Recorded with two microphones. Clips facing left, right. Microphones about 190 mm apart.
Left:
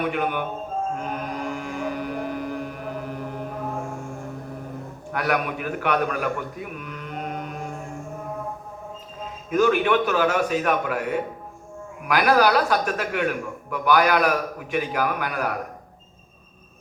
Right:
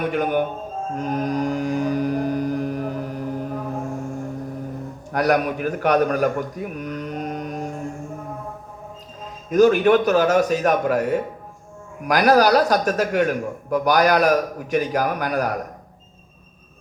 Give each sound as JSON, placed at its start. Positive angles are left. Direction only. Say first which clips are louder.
{"t": 0.1, "sound": "a man's voice", "louder": "right 5 dB", "side_deg": -40}
{"t": 0.9, "sound": "mantra", "louder": "right 7 dB", "side_deg": -40}
{"t": 5.1, "sound": "a man's voice", "louder": "right 5 dB", "side_deg": -40}
{"t": 9.5, "sound": "a man's voice", "louder": "right 5 dB", "side_deg": -40}